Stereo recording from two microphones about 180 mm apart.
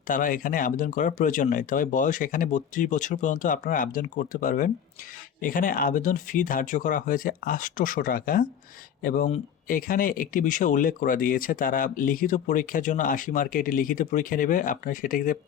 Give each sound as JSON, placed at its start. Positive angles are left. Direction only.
{"t": 0.1, "sound": "speech", "side_deg": 50}